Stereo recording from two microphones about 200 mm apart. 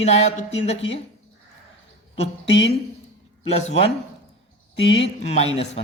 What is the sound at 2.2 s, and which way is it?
Speech, 30° left (ahead or behind).